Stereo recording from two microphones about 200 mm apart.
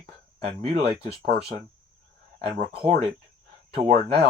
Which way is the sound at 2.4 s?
30° right (ahead or behind).